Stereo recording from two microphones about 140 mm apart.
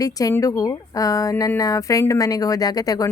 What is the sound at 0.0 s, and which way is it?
A woman's voice, 25° left (ahead or behind).